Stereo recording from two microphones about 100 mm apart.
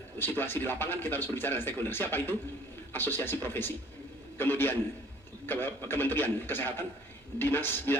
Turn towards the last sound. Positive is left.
turn(degrees=20)  # may be behind; listen again after turning